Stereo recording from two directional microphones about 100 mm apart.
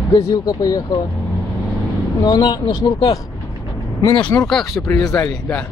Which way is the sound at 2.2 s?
45° left (ahead or behind).